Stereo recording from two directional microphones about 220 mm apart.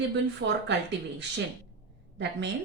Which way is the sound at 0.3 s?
50° right (ahead or behind).